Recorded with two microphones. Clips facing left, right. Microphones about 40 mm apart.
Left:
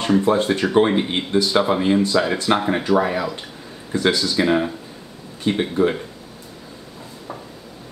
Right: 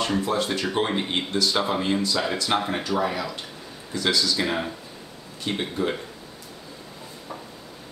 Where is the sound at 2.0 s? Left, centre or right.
Left.